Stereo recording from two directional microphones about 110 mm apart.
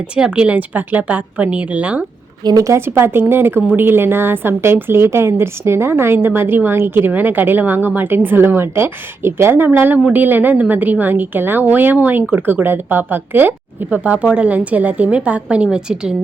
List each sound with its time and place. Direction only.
0.2 s a woman's voice: 10° right (ahead or behind)
2.4 s a woman's voice: 35° right (ahead or behind); by 16.1 s 5° right (ahead or behind)